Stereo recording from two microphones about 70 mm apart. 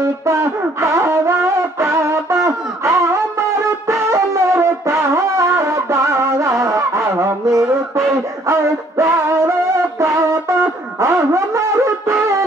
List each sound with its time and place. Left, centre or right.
0.0 s music: right